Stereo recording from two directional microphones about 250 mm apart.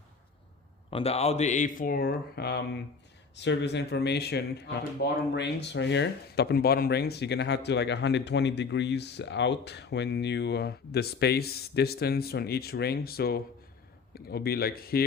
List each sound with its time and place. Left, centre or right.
0.9 s speech: left